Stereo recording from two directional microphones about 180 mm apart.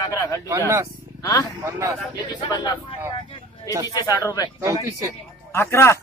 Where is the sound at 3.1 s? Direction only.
30° left (ahead or behind).